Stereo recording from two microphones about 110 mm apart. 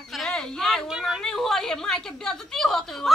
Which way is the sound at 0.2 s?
5° left (ahead or behind).